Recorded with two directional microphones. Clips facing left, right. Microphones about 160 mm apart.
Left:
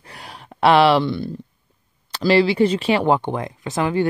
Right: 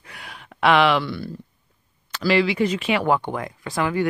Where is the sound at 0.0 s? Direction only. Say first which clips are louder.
Left 3 dB; 35° left (ahead or behind).